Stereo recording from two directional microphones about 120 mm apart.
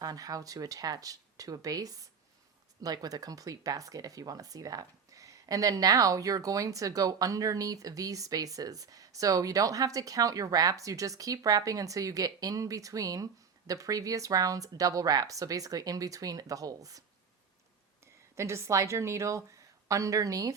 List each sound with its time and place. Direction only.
0.0 s speech: 30° right (ahead or behind)
18.0 s speech: 25° right (ahead or behind)